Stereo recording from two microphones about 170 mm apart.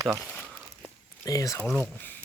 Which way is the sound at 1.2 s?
20° left (ahead or behind).